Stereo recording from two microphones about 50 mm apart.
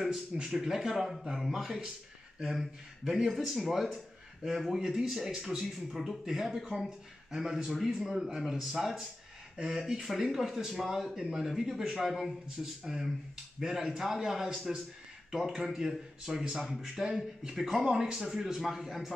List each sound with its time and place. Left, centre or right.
0.1 s speech: centre
17.8 s speech: centre